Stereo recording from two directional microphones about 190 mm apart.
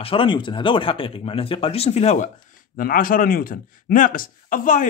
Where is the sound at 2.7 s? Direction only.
50° left (ahead or behind).